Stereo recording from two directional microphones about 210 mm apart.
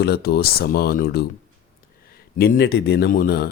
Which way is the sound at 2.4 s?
50° left (ahead or behind).